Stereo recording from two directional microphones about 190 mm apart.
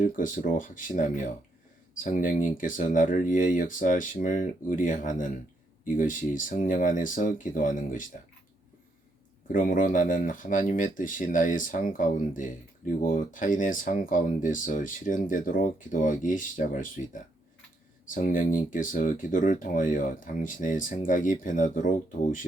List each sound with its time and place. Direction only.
0.0 s speech: 45° left (ahead or behind)
9.5 s speech: 45° left (ahead or behind)